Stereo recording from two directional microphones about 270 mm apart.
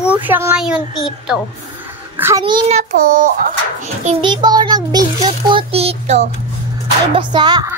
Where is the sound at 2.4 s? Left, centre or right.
Centre.